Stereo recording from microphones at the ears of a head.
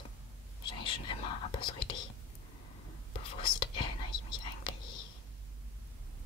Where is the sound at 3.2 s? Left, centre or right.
Left.